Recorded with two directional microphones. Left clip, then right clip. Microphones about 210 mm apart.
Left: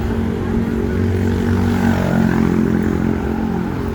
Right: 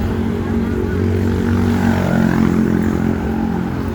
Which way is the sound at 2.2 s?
35° right (ahead or behind).